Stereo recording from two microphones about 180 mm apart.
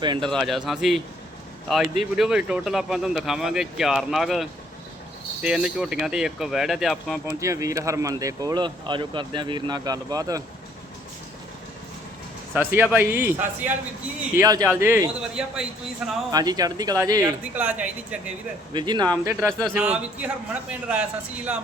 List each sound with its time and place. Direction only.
0.2 s speech: centre (ahead or behind)
7.3 s speech: 15° right (ahead or behind)
12.5 s speech: 10° right (ahead or behind)
16.3 s speech: 20° right (ahead or behind)
17.5 s speech: 10° right (ahead or behind)
18.7 s speech: 25° right (ahead or behind); by 21.6 s 5° right (ahead or behind)